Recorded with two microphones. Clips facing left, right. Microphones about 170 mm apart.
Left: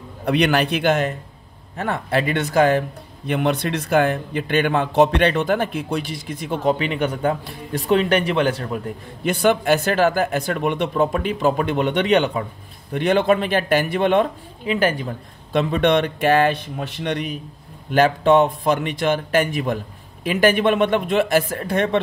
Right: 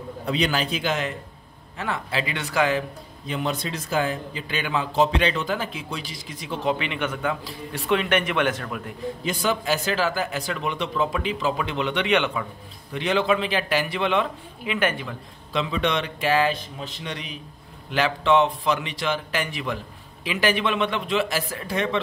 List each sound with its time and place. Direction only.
0.2 s speech: 65° left (ahead or behind); by 2.8 s 45° left (ahead or behind)
3.3 s speech: 60° left (ahead or behind); by 8.8 s 35° left (ahead or behind)
9.2 s speech: 60° left (ahead or behind); by 12.4 s 40° left (ahead or behind)
12.9 s speech: 50° left (ahead or behind)
14.6 s speech: 35° left (ahead or behind)
15.5 s speech: 50° left (ahead or behind)